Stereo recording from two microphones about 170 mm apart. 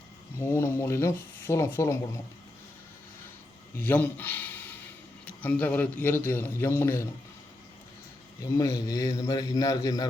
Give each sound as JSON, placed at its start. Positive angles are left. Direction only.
{"t": 0.3, "sound": "speech", "side_deg": 15}
{"t": 3.8, "sound": "a man's voice", "side_deg": 10}
{"t": 8.5, "sound": "a man's voice", "side_deg": 20}